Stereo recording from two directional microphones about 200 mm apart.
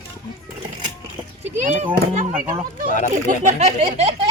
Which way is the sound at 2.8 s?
40° left (ahead or behind).